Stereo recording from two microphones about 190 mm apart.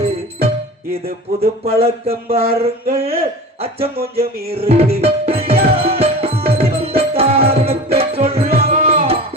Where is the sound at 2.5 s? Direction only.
50° right (ahead or behind).